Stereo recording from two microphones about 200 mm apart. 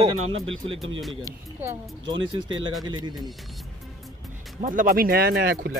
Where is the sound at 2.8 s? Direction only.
20° right (ahead or behind).